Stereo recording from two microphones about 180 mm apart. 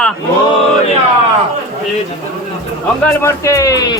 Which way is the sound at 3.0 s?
15° left (ahead or behind).